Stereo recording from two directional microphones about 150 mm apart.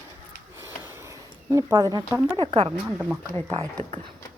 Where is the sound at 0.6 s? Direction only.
15° right (ahead or behind).